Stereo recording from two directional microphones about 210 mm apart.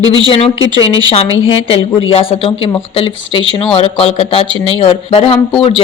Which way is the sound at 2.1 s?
25° left (ahead or behind).